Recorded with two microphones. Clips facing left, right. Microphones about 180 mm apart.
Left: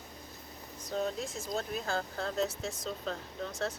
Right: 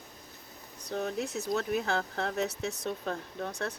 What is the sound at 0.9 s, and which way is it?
Speech, 65° right (ahead or behind).